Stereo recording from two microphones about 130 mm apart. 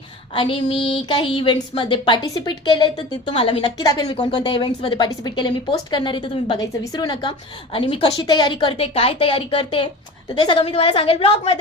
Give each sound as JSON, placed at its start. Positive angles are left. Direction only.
{"t": 0.3, "sound": "a woman's voice", "side_deg": 40}
{"t": 3.8, "sound": "a woman's voice", "side_deg": 30}
{"t": 10.6, "sound": "a woman's voice", "side_deg": 50}